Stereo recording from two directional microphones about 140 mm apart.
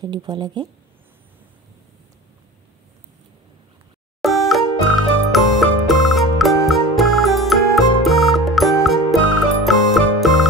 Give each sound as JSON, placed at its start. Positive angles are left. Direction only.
{"t": 0.0, "sound": "speech", "side_deg": -30}
{"t": 4.2, "sound": "music", "side_deg": 0}